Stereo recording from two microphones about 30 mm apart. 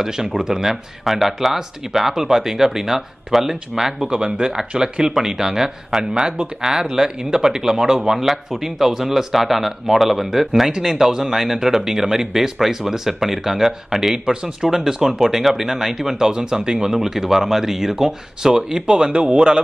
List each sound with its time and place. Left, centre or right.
0.4 s speech: centre
1.0 s speech: centre
4.1 s speech: right
5.1 s speech: centre
14.2 s speech: right